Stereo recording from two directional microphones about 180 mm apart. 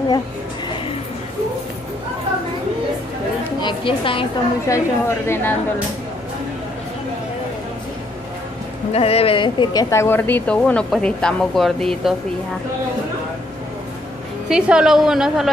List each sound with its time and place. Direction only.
3.6 s a woman's voice: 30° left (ahead or behind)
4.6 s speech: 15° left (ahead or behind)
8.9 s speech: 35° left (ahead or behind); by 12.2 s centre (ahead or behind)
14.5 s a woman's voice: 5° right (ahead or behind)